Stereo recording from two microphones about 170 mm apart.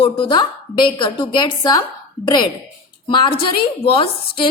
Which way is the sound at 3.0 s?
30° left (ahead or behind).